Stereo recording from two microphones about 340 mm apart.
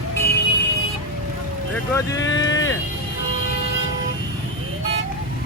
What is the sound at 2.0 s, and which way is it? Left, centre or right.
Speech, centre.